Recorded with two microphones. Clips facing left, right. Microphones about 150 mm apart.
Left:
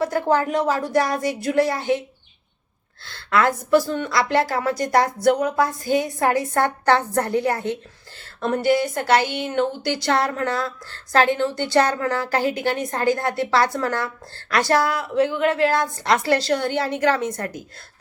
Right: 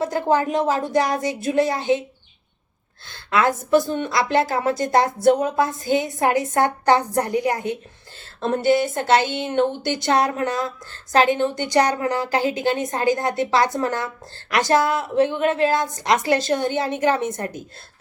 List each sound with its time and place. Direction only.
0.0 s a woman's voice: 20° right (ahead or behind)
3.1 s a woman's voice: 20° right (ahead or behind)
8.4 s a woman's voice: 25° right (ahead or behind)